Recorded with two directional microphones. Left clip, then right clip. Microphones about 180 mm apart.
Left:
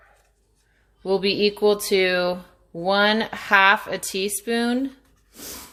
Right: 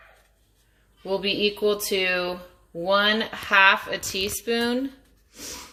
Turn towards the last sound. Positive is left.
turn(degrees=60)  # may be behind; listen again after turning